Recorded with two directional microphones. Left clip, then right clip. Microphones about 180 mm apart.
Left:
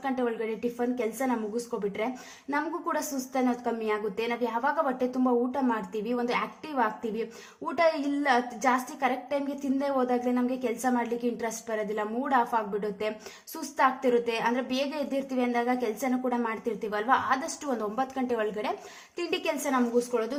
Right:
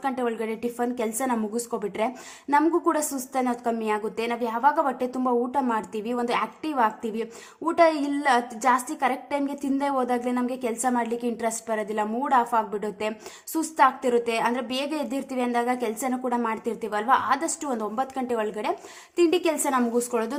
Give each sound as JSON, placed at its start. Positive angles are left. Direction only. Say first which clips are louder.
{"t": 0.0, "sound": "a woman's voice", "louder": "right 3 dB", "side_deg": -20}
{"t": 20.0, "sound": "a woman's voice", "louder": "right 2 dB", "side_deg": -40}